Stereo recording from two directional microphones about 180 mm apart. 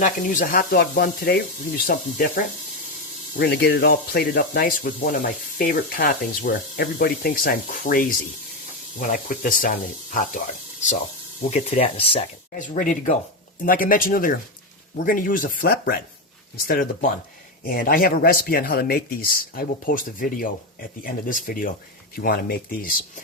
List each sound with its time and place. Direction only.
0.0 s speech: 50° left (ahead or behind)
3.3 s speech: 60° left (ahead or behind); by 10.9 s 45° left (ahead or behind)
11.5 s speech: 35° left (ahead or behind)
12.5 s speech: 45° left (ahead or behind)